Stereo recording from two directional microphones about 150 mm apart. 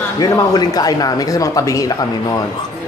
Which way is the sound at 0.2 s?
25° left (ahead or behind).